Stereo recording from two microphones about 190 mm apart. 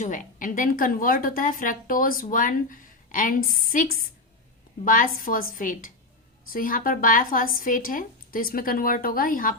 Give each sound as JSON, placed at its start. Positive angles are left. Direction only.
{"t": 0.0, "sound": "a woman's voice", "side_deg": 40}